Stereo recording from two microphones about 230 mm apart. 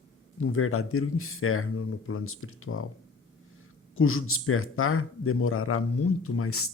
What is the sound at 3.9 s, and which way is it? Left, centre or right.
Speech, left.